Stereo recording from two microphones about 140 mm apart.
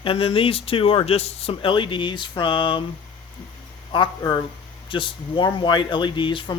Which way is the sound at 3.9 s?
30° left (ahead or behind).